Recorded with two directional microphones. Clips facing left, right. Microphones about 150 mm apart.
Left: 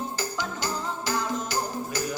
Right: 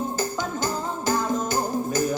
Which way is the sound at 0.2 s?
50° right (ahead or behind).